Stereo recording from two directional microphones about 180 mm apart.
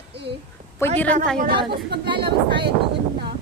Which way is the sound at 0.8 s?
15° left (ahead or behind).